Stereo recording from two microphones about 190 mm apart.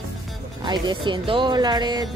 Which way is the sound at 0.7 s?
25° right (ahead or behind).